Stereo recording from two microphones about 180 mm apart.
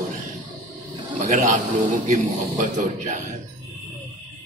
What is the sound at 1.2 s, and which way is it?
A man's voice, 45° right (ahead or behind).